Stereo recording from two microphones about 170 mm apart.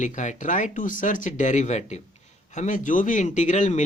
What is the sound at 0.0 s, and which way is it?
Speech, 45° left (ahead or behind).